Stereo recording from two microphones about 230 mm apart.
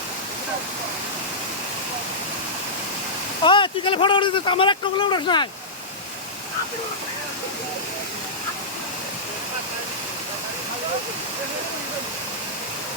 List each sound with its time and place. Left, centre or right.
3.4 s speech: left